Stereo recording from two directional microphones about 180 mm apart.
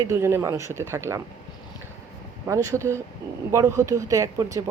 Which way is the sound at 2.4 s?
15° right (ahead or behind).